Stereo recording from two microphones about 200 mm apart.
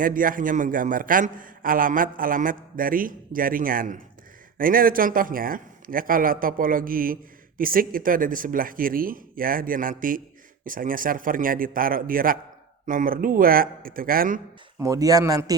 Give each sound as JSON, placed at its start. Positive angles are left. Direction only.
{"t": 0.0, "sound": "a man's voice", "side_deg": -45}
{"t": 14.8, "sound": "a man's voice", "side_deg": -15}